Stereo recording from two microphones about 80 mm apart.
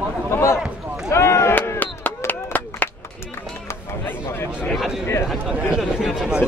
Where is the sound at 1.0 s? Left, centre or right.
Left.